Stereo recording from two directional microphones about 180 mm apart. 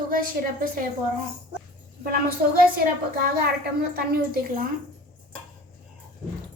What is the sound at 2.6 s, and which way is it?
Speech, 55° right (ahead or behind).